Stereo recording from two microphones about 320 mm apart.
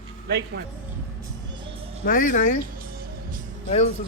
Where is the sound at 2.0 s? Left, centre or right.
Left.